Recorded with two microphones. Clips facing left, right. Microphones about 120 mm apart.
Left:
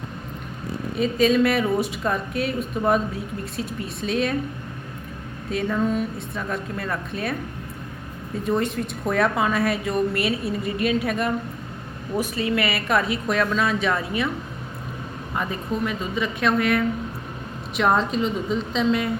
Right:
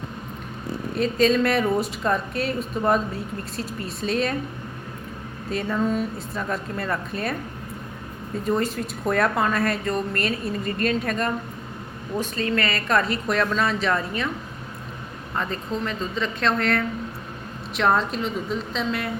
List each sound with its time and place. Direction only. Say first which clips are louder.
0.9 s a woman's voice: left 1 dB; 5° left (ahead or behind)
5.5 s a woman's voice: left 1 dB; centre (ahead or behind)
8.4 s a woman's voice: left 1 dB; centre (ahead or behind)
15.4 s a woman's voice: left 1 dB; 10° left (ahead or behind)